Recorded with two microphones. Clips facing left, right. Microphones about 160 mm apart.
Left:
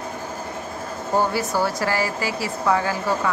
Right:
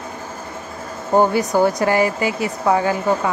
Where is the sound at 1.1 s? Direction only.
20° right (ahead or behind).